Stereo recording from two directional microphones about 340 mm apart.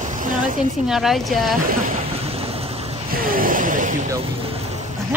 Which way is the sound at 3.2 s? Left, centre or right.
Right.